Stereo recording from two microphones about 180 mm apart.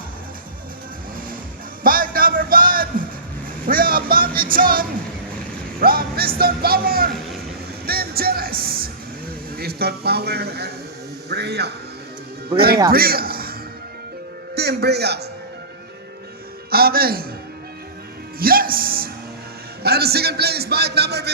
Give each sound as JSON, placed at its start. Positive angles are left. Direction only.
{"t": 1.8, "sound": "music", "side_deg": -50}
{"t": 3.7, "sound": "a man's voice", "side_deg": -55}
{"t": 7.9, "sound": "music", "side_deg": -60}
{"t": 9.6, "sound": "a man's voice", "side_deg": -60}
{"t": 12.9, "sound": "a man's voice", "side_deg": -55}
{"t": 16.6, "sound": "a man's voice", "side_deg": -55}
{"t": 18.3, "sound": "a man's voice", "side_deg": -55}